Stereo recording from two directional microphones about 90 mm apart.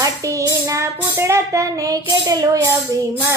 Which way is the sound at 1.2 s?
30° right (ahead or behind).